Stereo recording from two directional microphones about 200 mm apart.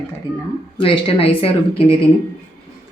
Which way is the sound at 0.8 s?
30° left (ahead or behind).